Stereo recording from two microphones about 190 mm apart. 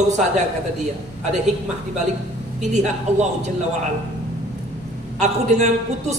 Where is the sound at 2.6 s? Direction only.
40° right (ahead or behind).